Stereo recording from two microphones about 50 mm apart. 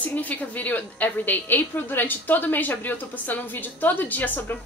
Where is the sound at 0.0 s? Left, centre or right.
Left.